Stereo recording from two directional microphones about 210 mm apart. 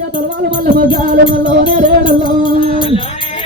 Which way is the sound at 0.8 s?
25° left (ahead or behind).